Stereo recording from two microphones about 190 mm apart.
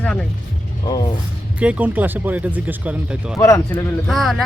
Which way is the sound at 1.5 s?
5° right (ahead or behind).